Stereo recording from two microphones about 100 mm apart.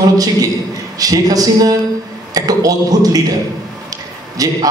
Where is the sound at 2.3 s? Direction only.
40° right (ahead or behind).